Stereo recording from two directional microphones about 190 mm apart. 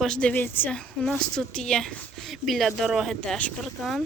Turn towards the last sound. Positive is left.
turn(degrees=0)  # may be behind; listen again after turning